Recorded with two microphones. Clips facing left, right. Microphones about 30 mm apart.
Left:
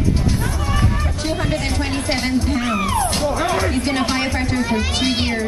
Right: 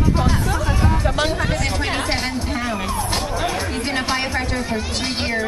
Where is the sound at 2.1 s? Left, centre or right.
Centre.